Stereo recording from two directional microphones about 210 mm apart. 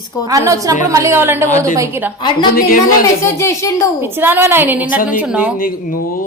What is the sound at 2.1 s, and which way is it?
Speech, 20° left (ahead or behind).